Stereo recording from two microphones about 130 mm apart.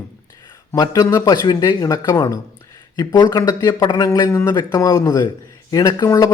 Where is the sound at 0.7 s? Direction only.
25° left (ahead or behind).